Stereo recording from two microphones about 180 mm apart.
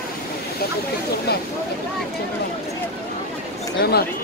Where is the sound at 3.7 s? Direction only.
60° left (ahead or behind).